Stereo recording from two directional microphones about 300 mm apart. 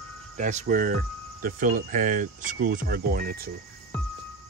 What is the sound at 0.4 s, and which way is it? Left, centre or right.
Speech, right.